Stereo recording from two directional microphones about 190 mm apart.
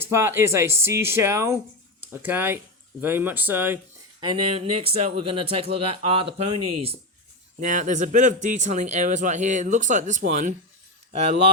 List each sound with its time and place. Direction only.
0.0 s speech: 15° right (ahead or behind)
4.2 s speech: 25° right (ahead or behind)
7.6 s speech: 45° right (ahead or behind)